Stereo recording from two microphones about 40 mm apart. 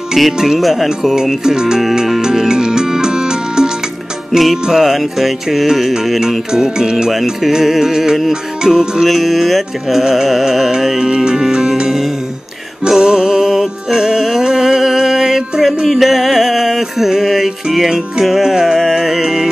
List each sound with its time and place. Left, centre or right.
0.1 s music: centre
0.6 s music: centre
4.3 s music: centre
6.5 s music: centre
11.1 s music: right